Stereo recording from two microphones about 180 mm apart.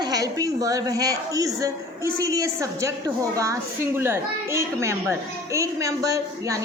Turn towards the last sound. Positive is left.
turn(degrees=-20)  # may be behind; listen again after turning